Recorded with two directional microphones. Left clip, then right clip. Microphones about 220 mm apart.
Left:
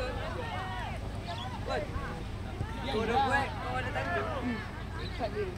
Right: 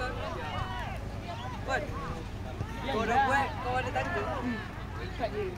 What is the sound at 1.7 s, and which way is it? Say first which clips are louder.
Speech: right 3 dB; 35° right (ahead or behind).